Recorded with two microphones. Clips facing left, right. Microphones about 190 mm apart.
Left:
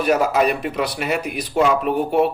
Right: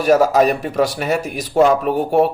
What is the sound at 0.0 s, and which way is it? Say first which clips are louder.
Speech: right 4 dB; 40° right (ahead or behind).